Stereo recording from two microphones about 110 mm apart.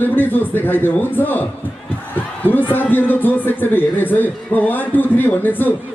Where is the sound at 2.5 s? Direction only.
15° left (ahead or behind).